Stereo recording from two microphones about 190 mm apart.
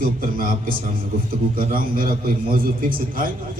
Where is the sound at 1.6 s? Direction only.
50° right (ahead or behind).